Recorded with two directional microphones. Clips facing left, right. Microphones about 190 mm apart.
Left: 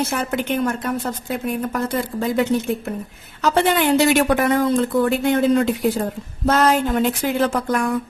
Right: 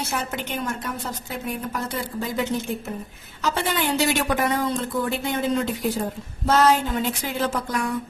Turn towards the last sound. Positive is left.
turn(degrees=60)  # may be behind; listen again after turning